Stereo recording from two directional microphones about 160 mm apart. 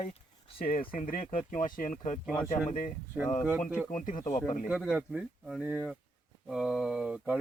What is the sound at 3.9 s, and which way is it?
Speech, 55° left (ahead or behind).